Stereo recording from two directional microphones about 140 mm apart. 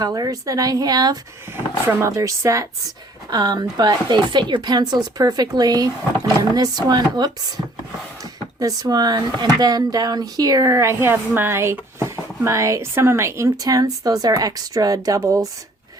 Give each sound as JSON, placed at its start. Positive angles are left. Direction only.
{"t": 0.0, "sound": "speech", "side_deg": -25}